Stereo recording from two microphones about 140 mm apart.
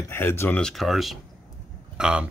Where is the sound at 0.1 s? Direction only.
15° left (ahead or behind).